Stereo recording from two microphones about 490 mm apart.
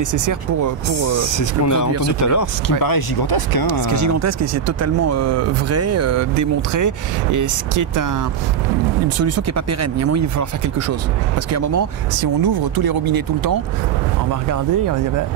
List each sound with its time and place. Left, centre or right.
0.1 s speech: right
0.9 s speech: left
3.9 s speech: right
9.2 s speech: right
11.5 s speech: right